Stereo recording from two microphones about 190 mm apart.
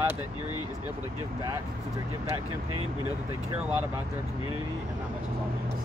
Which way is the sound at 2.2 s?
15° right (ahead or behind).